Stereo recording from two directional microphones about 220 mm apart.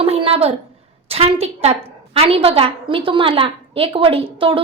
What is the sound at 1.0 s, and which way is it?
A woman's voice, 25° right (ahead or behind).